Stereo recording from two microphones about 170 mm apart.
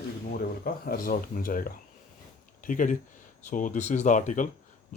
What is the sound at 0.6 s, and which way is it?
Speech, 55° left (ahead or behind).